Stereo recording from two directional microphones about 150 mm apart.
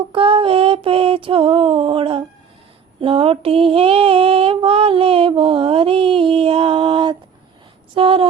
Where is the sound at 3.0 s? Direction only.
35° right (ahead or behind).